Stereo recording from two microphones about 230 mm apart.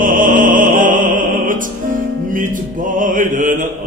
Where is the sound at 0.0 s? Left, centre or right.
Right.